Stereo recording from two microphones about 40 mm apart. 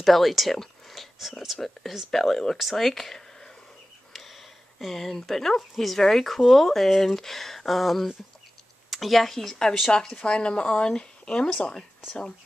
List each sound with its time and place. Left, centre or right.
0.0 s speech: centre
4.1 s a sound: centre
5.6 s speech: centre; by 11.8 s left